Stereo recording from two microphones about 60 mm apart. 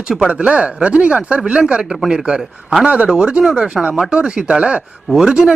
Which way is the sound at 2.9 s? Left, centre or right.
Centre.